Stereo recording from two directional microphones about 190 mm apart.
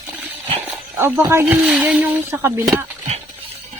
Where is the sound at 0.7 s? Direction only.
15° right (ahead or behind).